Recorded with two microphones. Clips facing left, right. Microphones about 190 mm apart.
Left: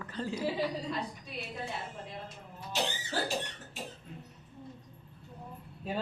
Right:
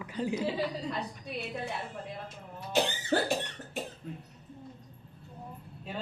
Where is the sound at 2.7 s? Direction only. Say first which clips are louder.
Right 6 dB; 55° right (ahead or behind).